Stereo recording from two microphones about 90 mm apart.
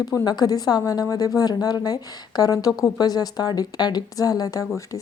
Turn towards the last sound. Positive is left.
turn(degrees=40)  # may be behind; listen again after turning